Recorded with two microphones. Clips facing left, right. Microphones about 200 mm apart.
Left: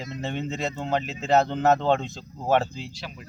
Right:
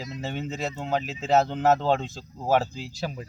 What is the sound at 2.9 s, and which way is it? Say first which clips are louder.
Speech: right 7 dB; 40° right (ahead or behind).